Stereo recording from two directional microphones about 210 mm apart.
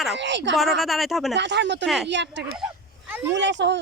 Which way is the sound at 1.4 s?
60° right (ahead or behind).